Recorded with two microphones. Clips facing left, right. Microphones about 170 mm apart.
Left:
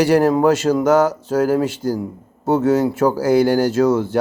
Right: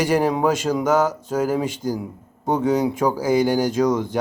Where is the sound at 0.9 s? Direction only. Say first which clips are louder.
Left 3 dB; 10° left (ahead or behind).